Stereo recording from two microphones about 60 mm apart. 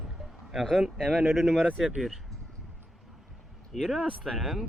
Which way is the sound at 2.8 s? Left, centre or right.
Centre.